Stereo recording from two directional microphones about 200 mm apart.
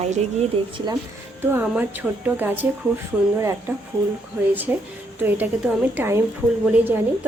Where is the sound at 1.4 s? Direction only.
10° right (ahead or behind).